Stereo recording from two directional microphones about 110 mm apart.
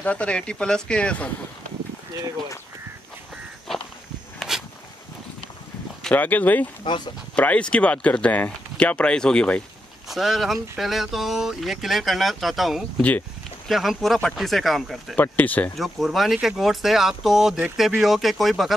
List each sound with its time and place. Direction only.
0.0 s speech: 10° left (ahead or behind)
4.4 s a sound: 5° right (ahead or behind)
6.0 s speech: 15° left (ahead or behind); by 15.1 s centre (ahead or behind)
15.1 s speech: 15° left (ahead or behind)
15.7 s speech: centre (ahead or behind)